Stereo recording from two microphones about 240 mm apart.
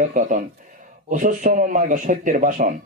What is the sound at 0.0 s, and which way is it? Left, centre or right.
Speech, right.